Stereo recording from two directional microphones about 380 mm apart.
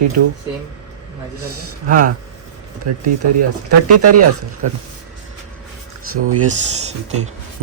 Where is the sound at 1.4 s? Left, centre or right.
Right.